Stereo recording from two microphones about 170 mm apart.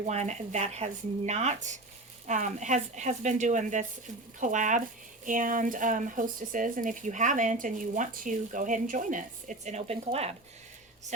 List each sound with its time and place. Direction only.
0.0 s speech: 40° right (ahead or behind)